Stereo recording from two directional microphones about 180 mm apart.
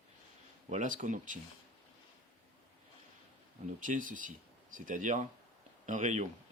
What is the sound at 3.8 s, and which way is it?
Speech, 45° right (ahead or behind).